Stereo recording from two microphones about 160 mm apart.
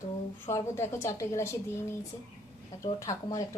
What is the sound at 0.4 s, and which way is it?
A woman's voice, 15° left (ahead or behind).